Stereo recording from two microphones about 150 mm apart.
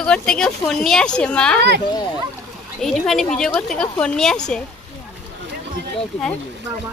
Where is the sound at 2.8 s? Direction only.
Centre (ahead or behind).